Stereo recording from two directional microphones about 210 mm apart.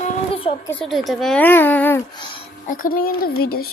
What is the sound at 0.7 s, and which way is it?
Speech, centre (ahead or behind).